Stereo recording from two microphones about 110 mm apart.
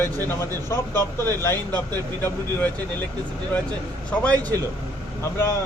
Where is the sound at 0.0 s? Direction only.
20° left (ahead or behind).